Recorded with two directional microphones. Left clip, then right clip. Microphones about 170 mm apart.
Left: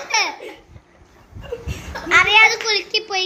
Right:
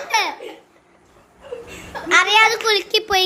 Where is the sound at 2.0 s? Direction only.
10° right (ahead or behind).